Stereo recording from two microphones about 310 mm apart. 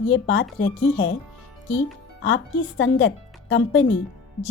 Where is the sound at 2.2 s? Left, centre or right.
Left.